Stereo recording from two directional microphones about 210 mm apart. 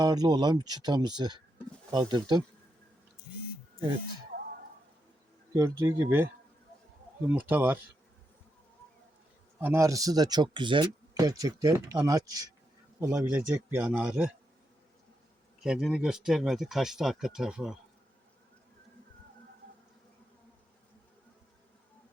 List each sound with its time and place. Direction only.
0.0 s speech: 20° right (ahead or behind)
5.5 s speech: 15° right (ahead or behind)
7.3 s speech: 10° right (ahead or behind)
9.6 s speech: 10° right (ahead or behind)
15.6 s speech: centre (ahead or behind)